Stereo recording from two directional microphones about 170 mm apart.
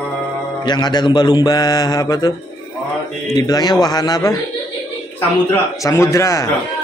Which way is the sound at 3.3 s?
25° left (ahead or behind).